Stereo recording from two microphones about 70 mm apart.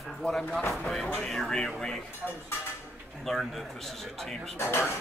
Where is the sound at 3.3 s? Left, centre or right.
Centre.